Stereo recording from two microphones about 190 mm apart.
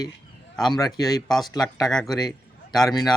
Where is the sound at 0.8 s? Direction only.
20° left (ahead or behind).